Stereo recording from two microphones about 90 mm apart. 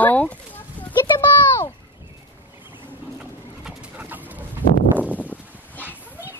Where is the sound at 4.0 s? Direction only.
20° right (ahead or behind).